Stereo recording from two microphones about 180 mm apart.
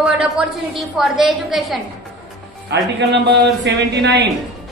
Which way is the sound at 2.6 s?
70° right (ahead or behind).